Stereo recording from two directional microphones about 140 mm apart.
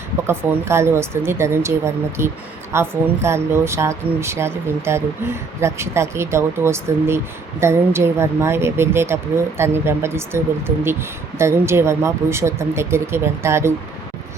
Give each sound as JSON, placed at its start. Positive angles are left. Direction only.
{"t": 0.3, "sound": "speech", "side_deg": -20}